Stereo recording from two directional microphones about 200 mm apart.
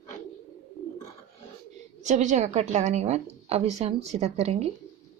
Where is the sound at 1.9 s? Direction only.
35° right (ahead or behind).